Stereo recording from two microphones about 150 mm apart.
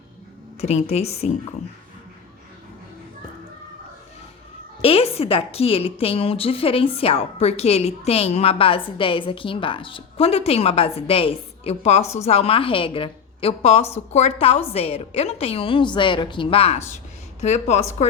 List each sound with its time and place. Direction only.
0.6 s a woman's voice: 45° left (ahead or behind)
4.8 s a woman's voice: 40° left (ahead or behind)